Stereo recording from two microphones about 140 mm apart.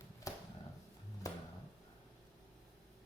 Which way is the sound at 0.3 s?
25° left (ahead or behind).